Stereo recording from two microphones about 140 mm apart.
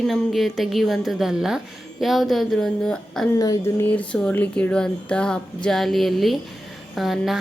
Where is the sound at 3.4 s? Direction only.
20° left (ahead or behind); by 7.4 s centre (ahead or behind).